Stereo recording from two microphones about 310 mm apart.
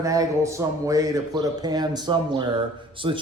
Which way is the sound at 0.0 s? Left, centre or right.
Centre.